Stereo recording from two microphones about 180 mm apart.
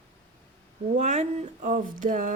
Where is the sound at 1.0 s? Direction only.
40° right (ahead or behind).